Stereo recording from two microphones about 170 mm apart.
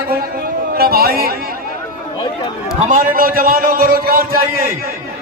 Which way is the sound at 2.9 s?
55° right (ahead or behind).